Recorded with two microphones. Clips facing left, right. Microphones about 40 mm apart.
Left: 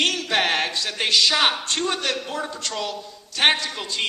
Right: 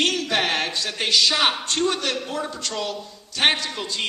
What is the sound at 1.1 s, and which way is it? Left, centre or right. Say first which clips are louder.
Speech: even; left.